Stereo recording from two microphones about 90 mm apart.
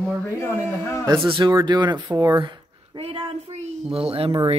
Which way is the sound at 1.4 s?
55° right (ahead or behind).